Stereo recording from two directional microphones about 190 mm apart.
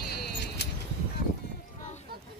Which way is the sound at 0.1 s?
60° left (ahead or behind).